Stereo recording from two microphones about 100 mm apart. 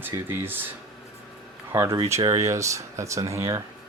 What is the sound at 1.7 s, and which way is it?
Speech, 25° right (ahead or behind).